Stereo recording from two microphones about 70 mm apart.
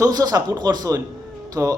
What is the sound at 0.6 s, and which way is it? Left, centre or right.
Speech, right.